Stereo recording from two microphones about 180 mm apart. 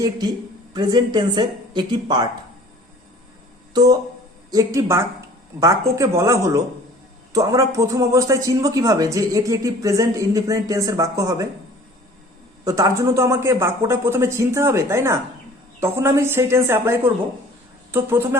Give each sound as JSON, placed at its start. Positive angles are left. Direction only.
{"t": 0.7, "sound": "speech", "side_deg": -25}
{"t": 3.7, "sound": "speech", "side_deg": -20}
{"t": 12.6, "sound": "speech", "side_deg": -20}